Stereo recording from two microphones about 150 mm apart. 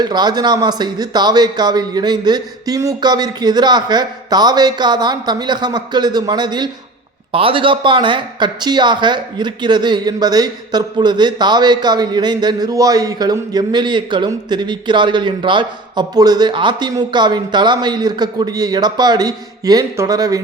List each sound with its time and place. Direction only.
0.0 s speech: 30° right (ahead or behind)